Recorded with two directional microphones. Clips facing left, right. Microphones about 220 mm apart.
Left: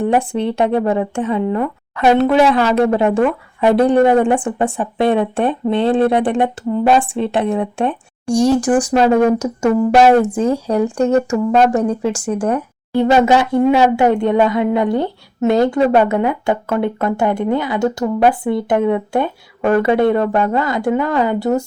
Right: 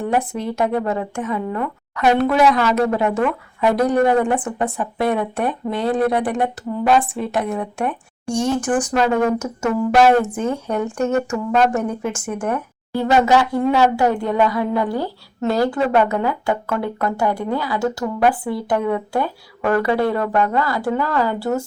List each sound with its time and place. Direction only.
0.2 s speech: 30° left (ahead or behind)
8.6 s speech: 15° left (ahead or behind)
8.9 s speech: 30° left (ahead or behind)
10.1 s speech: 15° left (ahead or behind)
10.3 s speech: 35° left (ahead or behind)